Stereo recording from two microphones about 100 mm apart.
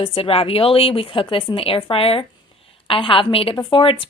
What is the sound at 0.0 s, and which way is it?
A woman's voice, 65° left (ahead or behind).